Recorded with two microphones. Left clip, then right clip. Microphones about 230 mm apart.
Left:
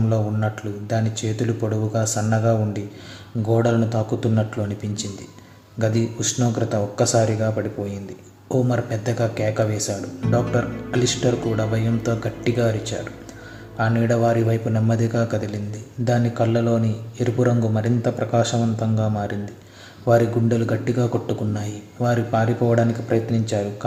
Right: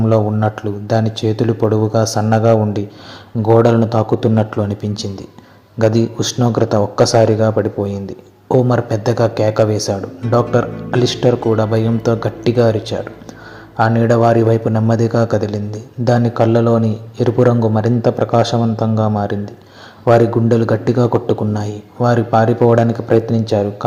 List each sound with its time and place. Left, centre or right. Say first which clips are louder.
0.1 s a man's voice: right 12 dB; right